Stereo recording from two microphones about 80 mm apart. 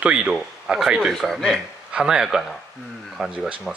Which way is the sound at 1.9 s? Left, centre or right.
Centre.